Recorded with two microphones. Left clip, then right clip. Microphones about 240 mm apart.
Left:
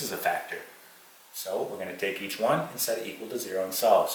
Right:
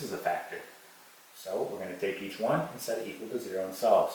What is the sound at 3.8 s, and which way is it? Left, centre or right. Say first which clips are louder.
Speech: left 2 dB; centre.